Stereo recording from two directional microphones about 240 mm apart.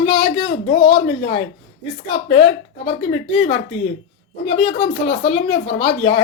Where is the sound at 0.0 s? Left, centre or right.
Left.